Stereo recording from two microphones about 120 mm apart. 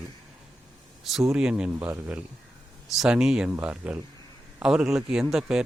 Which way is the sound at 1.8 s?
20° right (ahead or behind).